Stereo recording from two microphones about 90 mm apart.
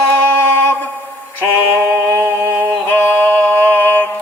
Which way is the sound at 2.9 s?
25° left (ahead or behind).